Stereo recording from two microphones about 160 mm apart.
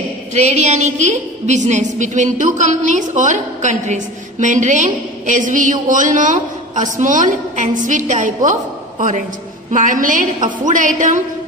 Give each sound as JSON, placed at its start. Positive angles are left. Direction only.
{"t": 0.3, "sound": "a woman's voice", "side_deg": -45}
{"t": 9.7, "sound": "a woman's voice", "side_deg": -55}